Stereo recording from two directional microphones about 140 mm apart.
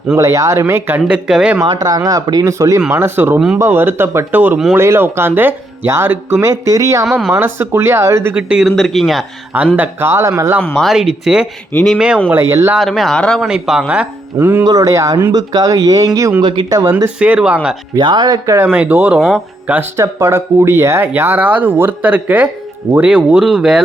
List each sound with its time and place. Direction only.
0.1 s speech: 25° right (ahead or behind); by 1.6 s 5° right (ahead or behind)
1.6 s speech: 25° right (ahead or behind); by 9.6 s centre (ahead or behind)
9.7 s speech: 15° right (ahead or behind)
10.8 s speech: centre (ahead or behind)
11.7 s speech: 10° left (ahead or behind)
11.9 s speech: 5° right (ahead or behind)
12.3 s speech: 20° right (ahead or behind)
12.7 s speech: centre (ahead or behind); by 16.9 s 25° right (ahead or behind)
17.2 s speech: 5° right (ahead or behind)
17.9 s speech: 35° right (ahead or behind); by 23.8 s 5° right (ahead or behind)